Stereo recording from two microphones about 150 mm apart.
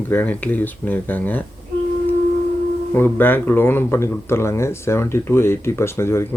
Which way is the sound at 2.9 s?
15° left (ahead or behind).